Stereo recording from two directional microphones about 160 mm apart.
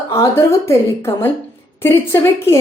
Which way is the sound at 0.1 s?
15° left (ahead or behind).